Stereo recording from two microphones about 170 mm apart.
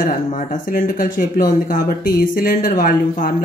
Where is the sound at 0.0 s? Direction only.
50° left (ahead or behind).